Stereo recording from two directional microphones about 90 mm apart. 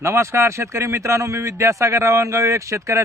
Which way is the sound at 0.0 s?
30° right (ahead or behind).